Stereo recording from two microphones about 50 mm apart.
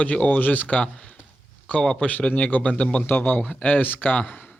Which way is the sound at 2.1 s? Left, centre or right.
Left.